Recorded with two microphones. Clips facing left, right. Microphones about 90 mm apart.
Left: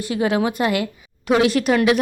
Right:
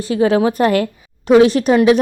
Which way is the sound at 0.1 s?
30° right (ahead or behind).